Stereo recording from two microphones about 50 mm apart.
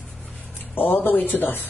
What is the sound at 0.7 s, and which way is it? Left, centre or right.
Speech, left.